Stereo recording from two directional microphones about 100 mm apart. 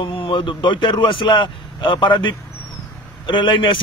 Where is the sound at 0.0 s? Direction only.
60° left (ahead or behind).